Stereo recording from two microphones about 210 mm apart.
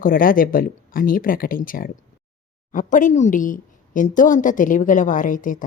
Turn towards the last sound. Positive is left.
turn(degrees=40)  # may be behind; listen again after turning